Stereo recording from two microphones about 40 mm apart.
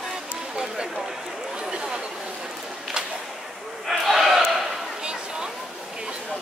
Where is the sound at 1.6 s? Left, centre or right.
Centre.